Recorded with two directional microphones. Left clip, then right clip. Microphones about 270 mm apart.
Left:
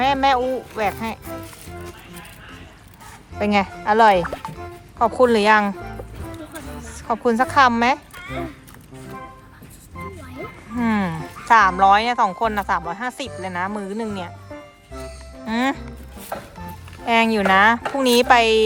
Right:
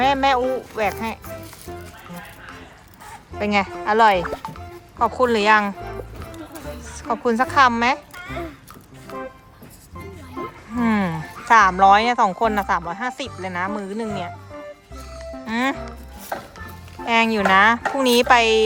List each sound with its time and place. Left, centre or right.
0.0 s speech: centre
3.3 s speech: centre
10.8 s speech: centre
15.4 s speech: centre
16.3 s music: right
17.1 s speech: centre